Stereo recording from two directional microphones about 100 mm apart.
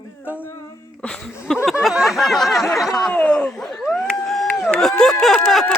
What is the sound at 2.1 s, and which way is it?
Snicker, centre (ahead or behind).